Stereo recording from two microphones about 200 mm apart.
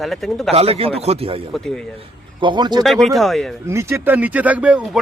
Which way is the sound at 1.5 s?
Centre (ahead or behind).